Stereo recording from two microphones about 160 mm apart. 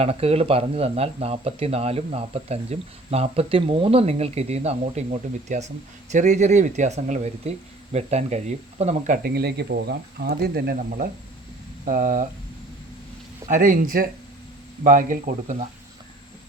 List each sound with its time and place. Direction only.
0.0 s speech: 40° right (ahead or behind)
9.2 s speech: 85° right
10.8 s speech: 60° right (ahead or behind)
13.5 s speech: 60° right (ahead or behind)